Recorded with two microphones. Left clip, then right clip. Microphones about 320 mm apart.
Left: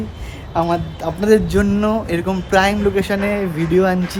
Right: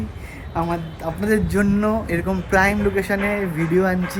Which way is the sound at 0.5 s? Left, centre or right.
Centre.